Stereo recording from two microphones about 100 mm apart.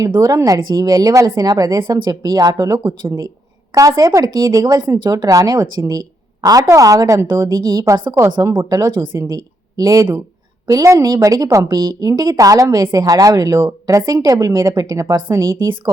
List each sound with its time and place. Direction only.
0.0 s a woman's voice: 35° right (ahead or behind)
7.6 s a woman's voice: 40° right (ahead or behind)